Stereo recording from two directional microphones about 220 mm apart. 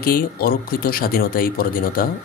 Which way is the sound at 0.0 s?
40° left (ahead or behind).